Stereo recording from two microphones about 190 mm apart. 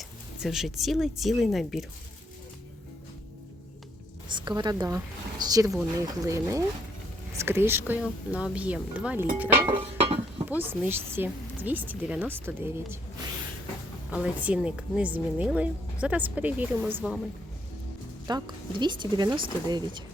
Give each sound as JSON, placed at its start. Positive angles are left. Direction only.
{"t": 0.0, "sound": "speech", "side_deg": 0}
{"t": 4.3, "sound": "a woman's voice", "side_deg": -25}
{"t": 9.6, "sound": "chink", "side_deg": -25}
{"t": 10.5, "sound": "a woman's voice", "side_deg": -10}
{"t": 14.1, "sound": "a woman's voice", "side_deg": -5}
{"t": 18.3, "sound": "speech", "side_deg": -20}